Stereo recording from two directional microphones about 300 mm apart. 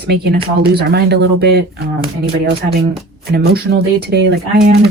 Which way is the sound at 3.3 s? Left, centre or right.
Right.